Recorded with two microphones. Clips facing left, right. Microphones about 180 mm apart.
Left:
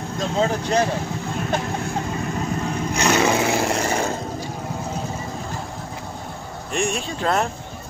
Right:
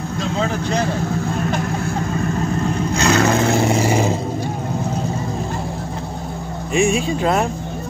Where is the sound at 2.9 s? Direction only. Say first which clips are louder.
Right 2 dB; 10° left (ahead or behind); by 4.2 s 10° right (ahead or behind).